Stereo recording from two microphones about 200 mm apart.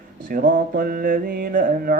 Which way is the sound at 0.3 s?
45° right (ahead or behind).